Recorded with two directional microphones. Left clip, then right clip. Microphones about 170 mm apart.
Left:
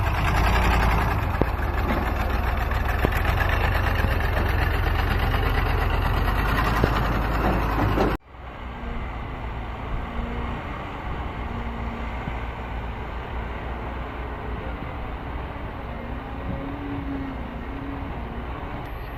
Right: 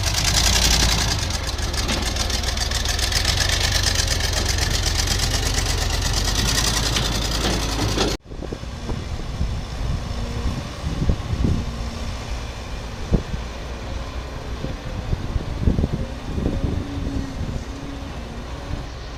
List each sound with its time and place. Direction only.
0.0 s vehicle: 35° right (ahead or behind)